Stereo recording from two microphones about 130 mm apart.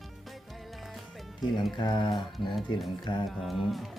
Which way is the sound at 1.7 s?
35° left (ahead or behind).